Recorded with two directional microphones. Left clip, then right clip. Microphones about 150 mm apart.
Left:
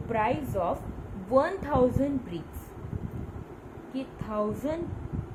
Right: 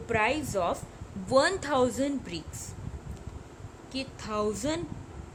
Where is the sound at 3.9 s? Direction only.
90° right.